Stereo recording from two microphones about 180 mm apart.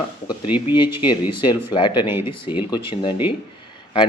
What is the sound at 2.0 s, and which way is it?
Speech, 10° right (ahead or behind).